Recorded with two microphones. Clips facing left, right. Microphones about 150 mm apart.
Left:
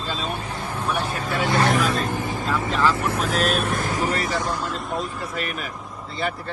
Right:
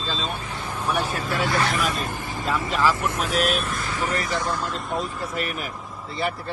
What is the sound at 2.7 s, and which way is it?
Speech, centre (ahead or behind).